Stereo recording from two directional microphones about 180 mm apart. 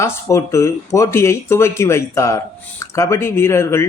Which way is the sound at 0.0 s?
15° left (ahead or behind).